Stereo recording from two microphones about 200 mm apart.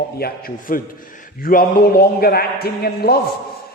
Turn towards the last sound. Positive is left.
turn(degrees=50)  # may be behind; listen again after turning